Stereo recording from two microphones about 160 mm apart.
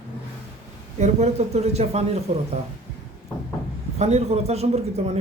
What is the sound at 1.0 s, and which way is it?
A man's voice, 45° right (ahead or behind).